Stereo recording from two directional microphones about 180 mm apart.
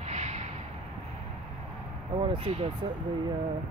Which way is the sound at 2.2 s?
35° right (ahead or behind).